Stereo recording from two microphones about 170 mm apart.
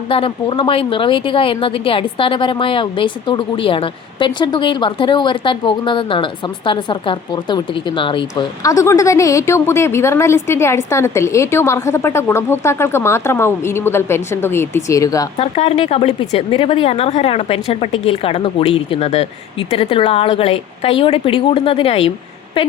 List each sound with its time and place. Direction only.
0.1 s a woman's voice: 30° left (ahead or behind)
15.4 s a woman's voice: 35° left (ahead or behind)